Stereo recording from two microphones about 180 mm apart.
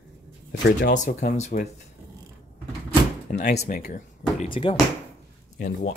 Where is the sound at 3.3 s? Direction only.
60° left (ahead or behind).